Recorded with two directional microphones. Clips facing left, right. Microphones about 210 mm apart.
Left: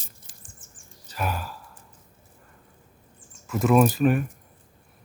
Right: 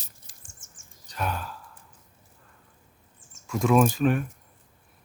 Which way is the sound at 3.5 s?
5° left (ahead or behind).